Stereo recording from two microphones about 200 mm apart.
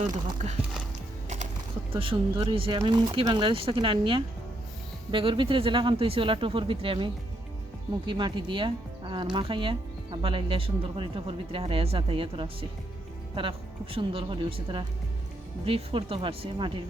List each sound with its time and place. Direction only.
1.9 s speech: 25° right (ahead or behind)